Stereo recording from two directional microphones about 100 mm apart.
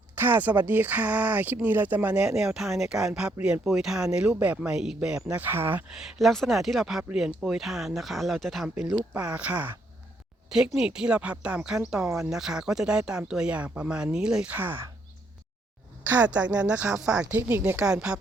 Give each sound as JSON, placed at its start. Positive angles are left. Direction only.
{"t": 0.2, "sound": "speech", "side_deg": -15}
{"t": 5.4, "sound": "speech", "side_deg": -20}
{"t": 5.9, "sound": "speech", "side_deg": 0}
{"t": 12.0, "sound": "speech", "side_deg": -30}
{"t": 12.3, "sound": "speech", "side_deg": -5}
{"t": 16.0, "sound": "speech", "side_deg": -15}
{"t": 17.7, "sound": "speech", "side_deg": -10}